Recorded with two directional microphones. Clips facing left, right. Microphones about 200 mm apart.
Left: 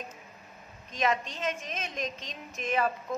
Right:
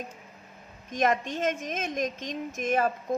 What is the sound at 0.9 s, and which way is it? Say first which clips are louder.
A woman's voice: right 4 dB; 50° right (ahead or behind).